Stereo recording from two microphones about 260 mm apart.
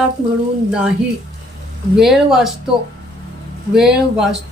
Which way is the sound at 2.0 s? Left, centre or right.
Centre.